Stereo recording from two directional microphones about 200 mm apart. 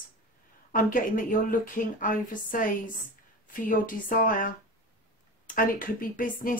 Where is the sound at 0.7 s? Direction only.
40° left (ahead or behind).